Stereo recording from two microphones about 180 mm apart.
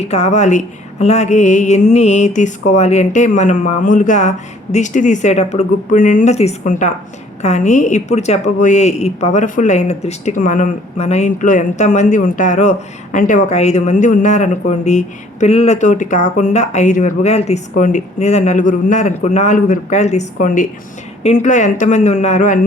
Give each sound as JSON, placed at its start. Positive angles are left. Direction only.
{"t": 0.0, "sound": "a woman's voice", "side_deg": 35}